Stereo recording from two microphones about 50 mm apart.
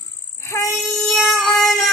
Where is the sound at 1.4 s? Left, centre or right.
Centre.